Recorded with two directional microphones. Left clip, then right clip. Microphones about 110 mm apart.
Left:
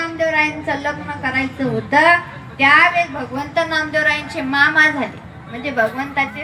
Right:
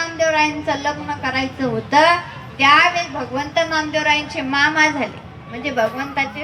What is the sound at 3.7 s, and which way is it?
A woman's voice, 30° left (ahead or behind).